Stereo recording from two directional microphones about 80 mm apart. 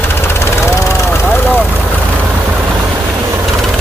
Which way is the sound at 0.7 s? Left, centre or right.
Left.